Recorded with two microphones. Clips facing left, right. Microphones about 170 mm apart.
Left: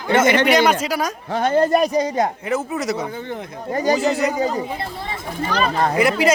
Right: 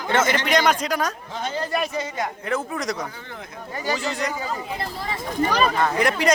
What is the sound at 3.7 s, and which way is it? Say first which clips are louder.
Speech: left 9 dB; 40° left (ahead or behind).